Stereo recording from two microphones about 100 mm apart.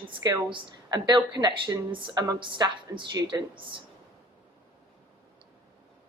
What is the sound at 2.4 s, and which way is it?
A woman's voice, 55° right (ahead or behind).